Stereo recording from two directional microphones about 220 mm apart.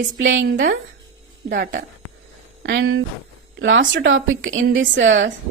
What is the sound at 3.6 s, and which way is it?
Speech, 55° right (ahead or behind).